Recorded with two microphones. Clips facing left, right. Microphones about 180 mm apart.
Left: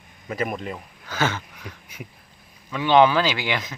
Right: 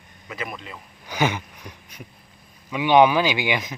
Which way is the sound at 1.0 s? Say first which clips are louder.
Right 2 dB; 15° right (ahead or behind).